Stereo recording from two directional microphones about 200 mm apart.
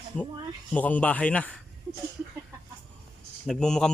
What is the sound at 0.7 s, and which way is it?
Speech, 5° left (ahead or behind).